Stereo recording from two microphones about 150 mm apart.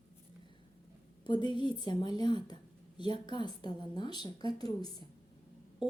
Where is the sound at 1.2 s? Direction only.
30° left (ahead or behind).